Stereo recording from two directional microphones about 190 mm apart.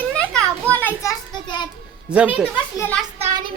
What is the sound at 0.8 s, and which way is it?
Children playing, 10° left (ahead or behind).